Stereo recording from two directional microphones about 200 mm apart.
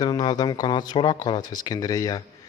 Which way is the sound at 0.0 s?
20° left (ahead or behind).